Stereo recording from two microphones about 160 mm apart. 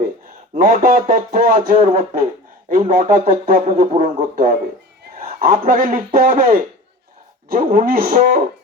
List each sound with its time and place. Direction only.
0.5 s speech: 55° right (ahead or behind)